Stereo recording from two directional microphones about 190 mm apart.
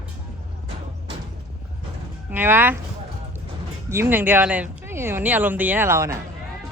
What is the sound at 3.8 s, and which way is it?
Speech, 10° right (ahead or behind).